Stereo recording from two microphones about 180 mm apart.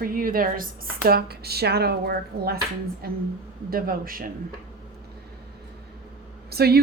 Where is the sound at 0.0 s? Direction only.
50° right (ahead or behind).